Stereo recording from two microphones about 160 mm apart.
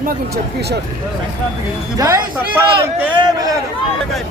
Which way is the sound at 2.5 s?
10° right (ahead or behind).